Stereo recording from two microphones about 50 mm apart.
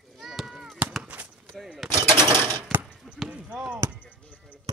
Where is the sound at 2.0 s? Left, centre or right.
Left.